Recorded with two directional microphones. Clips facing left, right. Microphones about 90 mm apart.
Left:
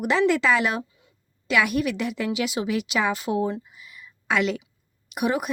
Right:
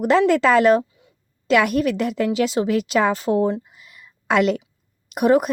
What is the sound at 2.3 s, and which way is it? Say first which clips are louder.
Speech: right 6 dB; 35° right (ahead or behind).